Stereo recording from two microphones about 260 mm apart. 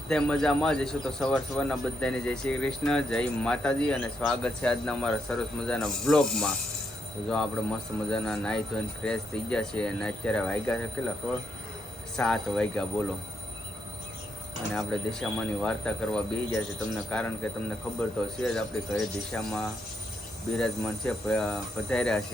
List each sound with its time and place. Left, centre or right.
0.1 s a man's voice: centre
12.1 s a man's voice: centre
14.7 s a man's voice: centre
18.3 s a man's voice: centre